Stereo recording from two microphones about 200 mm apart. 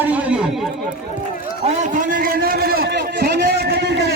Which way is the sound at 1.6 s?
40° right (ahead or behind).